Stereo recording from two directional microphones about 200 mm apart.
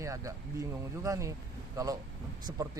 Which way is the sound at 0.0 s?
15° right (ahead or behind).